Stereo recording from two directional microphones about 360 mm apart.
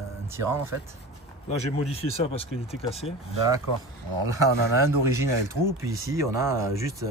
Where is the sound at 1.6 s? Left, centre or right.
Centre.